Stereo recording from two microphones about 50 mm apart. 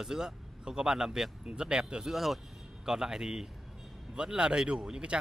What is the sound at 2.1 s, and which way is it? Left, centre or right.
Speech, centre.